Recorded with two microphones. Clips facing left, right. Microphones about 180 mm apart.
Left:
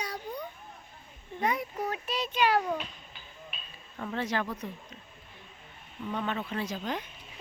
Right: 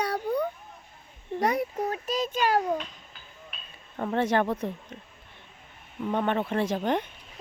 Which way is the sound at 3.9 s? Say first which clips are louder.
Right 7 dB; 50° right (ahead or behind).